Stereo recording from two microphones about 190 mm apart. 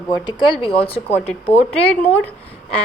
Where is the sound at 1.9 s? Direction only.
10° left (ahead or behind).